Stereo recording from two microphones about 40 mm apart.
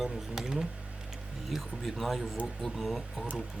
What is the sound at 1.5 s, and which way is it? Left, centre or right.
Speech, centre.